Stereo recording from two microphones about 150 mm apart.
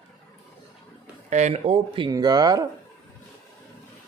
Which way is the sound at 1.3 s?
45° right (ahead or behind).